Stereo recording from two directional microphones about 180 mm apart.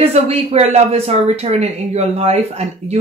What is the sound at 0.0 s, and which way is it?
Speech, 35° right (ahead or behind).